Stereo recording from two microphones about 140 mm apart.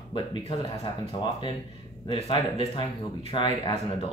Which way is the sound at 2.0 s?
40° left (ahead or behind).